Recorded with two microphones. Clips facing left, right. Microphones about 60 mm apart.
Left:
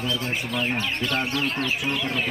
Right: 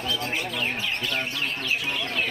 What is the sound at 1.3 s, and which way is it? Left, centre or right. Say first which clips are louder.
Bird: left 3 dB; centre.